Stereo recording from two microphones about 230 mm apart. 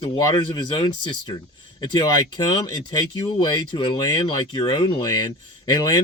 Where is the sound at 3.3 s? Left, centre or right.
Centre.